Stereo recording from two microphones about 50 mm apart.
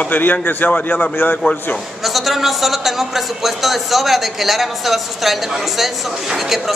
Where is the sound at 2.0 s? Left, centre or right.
Centre.